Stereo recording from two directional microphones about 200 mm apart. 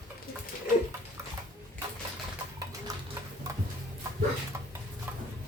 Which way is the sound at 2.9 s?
15° right (ahead or behind).